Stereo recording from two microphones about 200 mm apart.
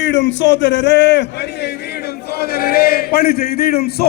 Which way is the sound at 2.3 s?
50° left (ahead or behind).